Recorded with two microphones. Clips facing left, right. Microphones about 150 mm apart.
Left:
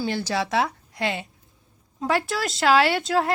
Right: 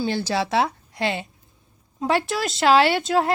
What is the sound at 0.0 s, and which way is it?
Speech, 30° right (ahead or behind).